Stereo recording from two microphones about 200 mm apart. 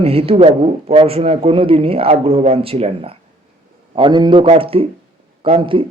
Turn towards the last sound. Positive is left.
turn(degrees=-25)  # may be behind; listen again after turning